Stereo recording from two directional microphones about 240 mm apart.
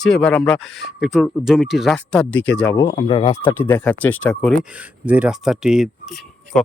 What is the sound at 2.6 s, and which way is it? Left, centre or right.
Speech, centre.